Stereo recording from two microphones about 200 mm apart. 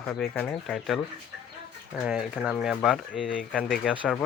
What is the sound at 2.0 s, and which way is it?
Speech, 5° right (ahead or behind).